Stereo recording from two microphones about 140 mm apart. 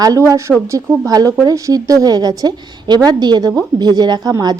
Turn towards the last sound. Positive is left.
turn(degrees=-25)  # may be behind; listen again after turning